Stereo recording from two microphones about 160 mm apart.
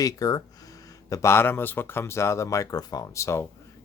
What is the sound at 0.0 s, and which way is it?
Speech, 25° left (ahead or behind).